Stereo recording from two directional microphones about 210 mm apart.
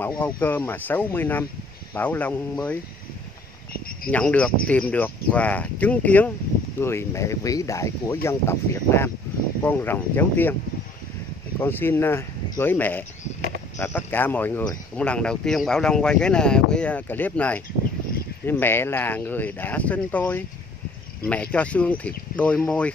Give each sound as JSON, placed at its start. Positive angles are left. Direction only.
{"t": 0.2, "sound": "speech", "side_deg": 10}
{"t": 3.7, "sound": "cricket", "side_deg": 45}
{"t": 4.1, "sound": "speech", "side_deg": 5}
{"t": 11.6, "sound": "speech", "side_deg": 10}